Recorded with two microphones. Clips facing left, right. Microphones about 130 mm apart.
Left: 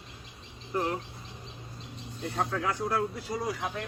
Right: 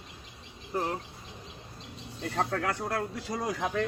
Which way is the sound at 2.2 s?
75° right (ahead or behind).